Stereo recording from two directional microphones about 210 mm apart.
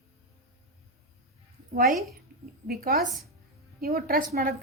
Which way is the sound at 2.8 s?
50° right (ahead or behind).